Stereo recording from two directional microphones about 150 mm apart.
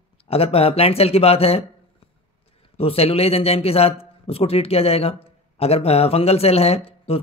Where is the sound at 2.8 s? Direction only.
40° left (ahead or behind).